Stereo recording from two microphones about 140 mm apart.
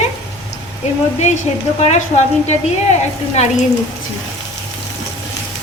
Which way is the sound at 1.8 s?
50° left (ahead or behind).